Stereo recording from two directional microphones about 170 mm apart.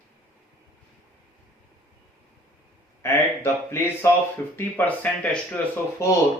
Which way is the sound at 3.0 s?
15° left (ahead or behind).